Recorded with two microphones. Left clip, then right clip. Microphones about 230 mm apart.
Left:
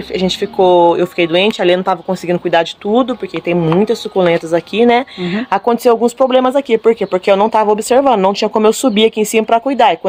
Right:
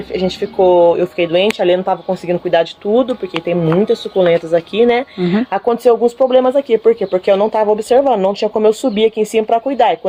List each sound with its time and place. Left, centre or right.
0.2 s speech: left